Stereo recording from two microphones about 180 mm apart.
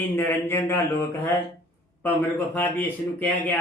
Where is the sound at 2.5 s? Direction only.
10° left (ahead or behind).